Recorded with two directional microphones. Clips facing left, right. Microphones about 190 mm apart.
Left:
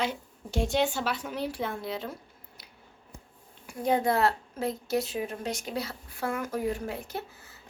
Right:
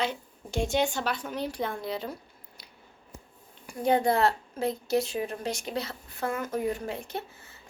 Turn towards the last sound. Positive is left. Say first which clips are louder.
# right 1 dB
turn(degrees=5)  # may be behind; listen again after turning